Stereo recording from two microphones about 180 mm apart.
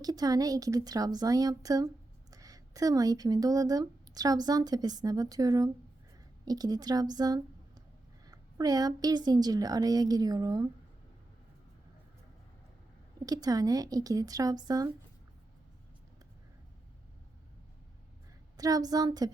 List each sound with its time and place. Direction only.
0.0 s speech: 20° right (ahead or behind)
13.2 s speech: 20° right (ahead or behind)
18.5 s speech: 20° right (ahead or behind)